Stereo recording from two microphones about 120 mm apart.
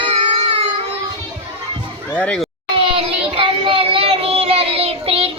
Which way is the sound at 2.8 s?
50° right (ahead or behind).